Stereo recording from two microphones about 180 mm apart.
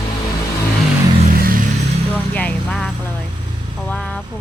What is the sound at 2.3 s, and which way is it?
Speech, 10° left (ahead or behind).